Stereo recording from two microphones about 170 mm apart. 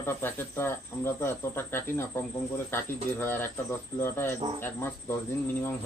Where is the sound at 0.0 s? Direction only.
15° left (ahead or behind).